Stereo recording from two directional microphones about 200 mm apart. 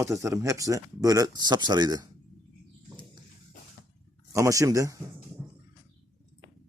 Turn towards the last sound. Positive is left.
turn(degrees=-15)  # may be behind; listen again after turning